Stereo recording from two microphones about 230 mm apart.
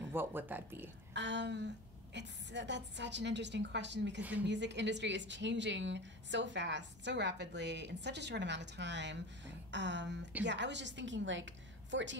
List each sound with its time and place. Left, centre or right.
0.1 s speech: centre
1.1 s a woman's voice: right
4.2 s speech: centre
4.5 s a woman's voice: right